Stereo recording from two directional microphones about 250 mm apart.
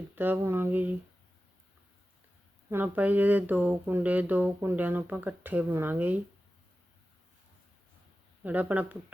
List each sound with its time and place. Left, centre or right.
0.2 s speech: centre
2.6 s speech: centre
8.4 s speech: centre